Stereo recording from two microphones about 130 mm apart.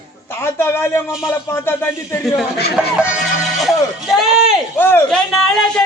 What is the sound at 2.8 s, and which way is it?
A man's voice, 10° right (ahead or behind).